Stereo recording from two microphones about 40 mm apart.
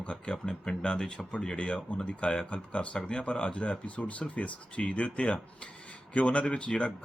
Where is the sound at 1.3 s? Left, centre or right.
Left.